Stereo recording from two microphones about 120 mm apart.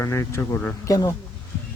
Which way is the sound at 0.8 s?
35° left (ahead or behind).